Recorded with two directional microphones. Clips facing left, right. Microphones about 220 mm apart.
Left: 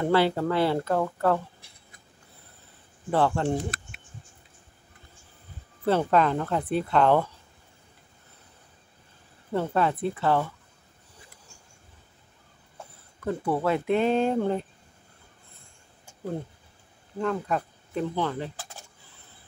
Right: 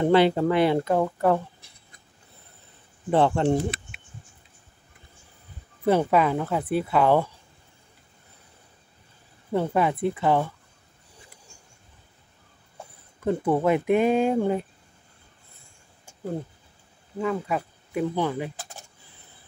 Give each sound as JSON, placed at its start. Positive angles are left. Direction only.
{"t": 0.0, "sound": "speech", "side_deg": -20}
{"t": 3.1, "sound": "speech", "side_deg": -20}
{"t": 5.9, "sound": "speech", "side_deg": -10}
{"t": 9.5, "sound": "speech", "side_deg": -15}
{"t": 13.2, "sound": "speech", "side_deg": -20}
{"t": 17.2, "sound": "speech", "side_deg": -5}